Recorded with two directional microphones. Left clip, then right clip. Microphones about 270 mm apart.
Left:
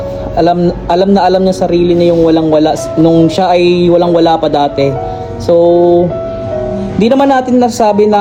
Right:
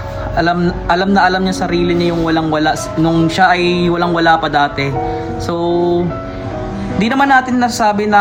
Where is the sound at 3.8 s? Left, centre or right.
Centre.